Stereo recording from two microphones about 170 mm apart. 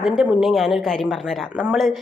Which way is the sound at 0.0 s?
5° right (ahead or behind).